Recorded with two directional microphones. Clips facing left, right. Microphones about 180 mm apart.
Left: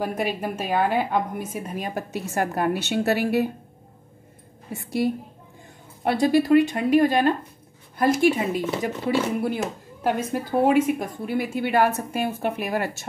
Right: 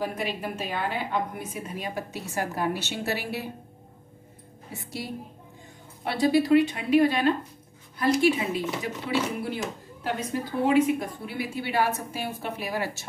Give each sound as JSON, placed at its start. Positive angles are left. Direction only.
{"t": 0.0, "sound": "a woman's voice", "side_deg": 50}
{"t": 5.0, "sound": "a woman's voice", "side_deg": 50}